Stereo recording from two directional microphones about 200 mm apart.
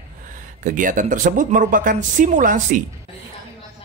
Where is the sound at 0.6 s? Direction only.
40° right (ahead or behind).